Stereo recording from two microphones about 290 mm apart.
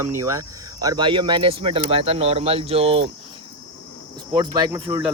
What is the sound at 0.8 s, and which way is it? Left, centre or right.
Speech, centre.